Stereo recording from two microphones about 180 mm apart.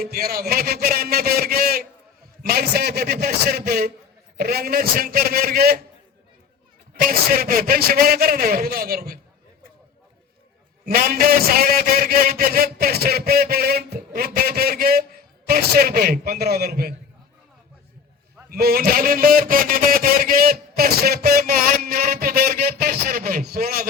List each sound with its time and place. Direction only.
0.0 s a man's voice: 55° right (ahead or behind)
7.0 s a man's voice: 55° right (ahead or behind)
10.8 s a man's voice: 55° right (ahead or behind)
18.4 s a man's voice: 55° right (ahead or behind)